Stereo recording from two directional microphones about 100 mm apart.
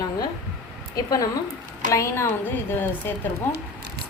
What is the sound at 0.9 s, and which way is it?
A woman's voice, 40° left (ahead or behind).